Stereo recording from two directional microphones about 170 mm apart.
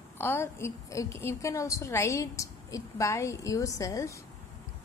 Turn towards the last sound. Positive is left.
turn(degrees=20)  # may be behind; listen again after turning